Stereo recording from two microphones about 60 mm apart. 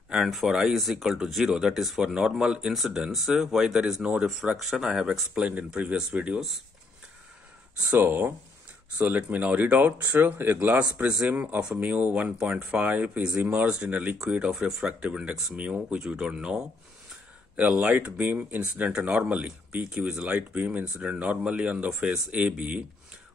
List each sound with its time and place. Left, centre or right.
0.1 s speech: centre
4.5 s speech: centre
5.3 s speech: right
8.0 s speech: right
14.6 s speech: centre